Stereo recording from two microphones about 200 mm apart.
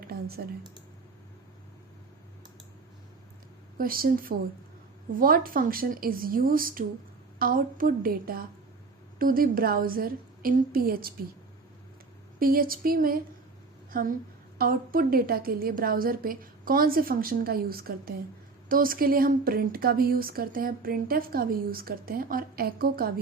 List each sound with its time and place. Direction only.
0.0 s a sound: 50° right (ahead or behind)
3.8 s speech: 45° right (ahead or behind)
12.4 s a woman's voice: 45° right (ahead or behind)